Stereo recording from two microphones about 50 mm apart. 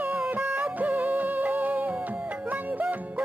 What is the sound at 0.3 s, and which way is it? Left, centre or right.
Music, right.